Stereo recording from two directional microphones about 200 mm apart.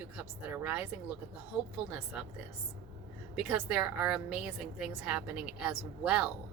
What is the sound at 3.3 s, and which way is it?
A woman's voice, 5° right (ahead or behind).